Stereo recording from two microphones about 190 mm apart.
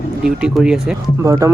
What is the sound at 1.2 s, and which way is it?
Speech, 15° right (ahead or behind).